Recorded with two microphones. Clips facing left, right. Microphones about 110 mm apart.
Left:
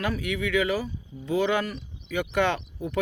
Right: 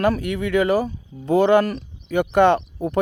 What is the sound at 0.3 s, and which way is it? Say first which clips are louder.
Speech: right 6 dB; 45° right (ahead or behind).